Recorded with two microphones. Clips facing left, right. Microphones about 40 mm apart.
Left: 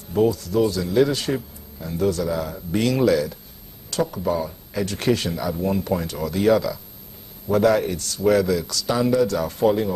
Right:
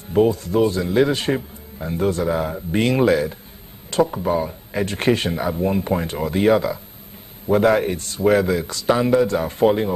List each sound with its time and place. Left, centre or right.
0.1 s a man's voice: right